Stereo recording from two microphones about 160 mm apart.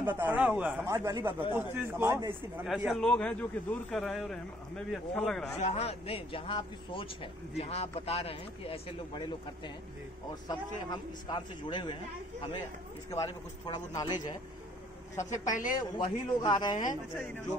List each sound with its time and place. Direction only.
0.0 s speech: 10° right (ahead or behind)
0.8 s speech: 20° right (ahead or behind)
2.0 s speech: 25° right (ahead or behind)
2.6 s a man's voice: centre (ahead or behind)
5.6 s speech: 40° left (ahead or behind)
10.5 s a man's voice: 25° left (ahead or behind)
13.1 s a man's voice: 20° left (ahead or behind)
15.2 s a woman's voice: 50° left (ahead or behind)
16.0 s a man's voice: 30° left (ahead or behind)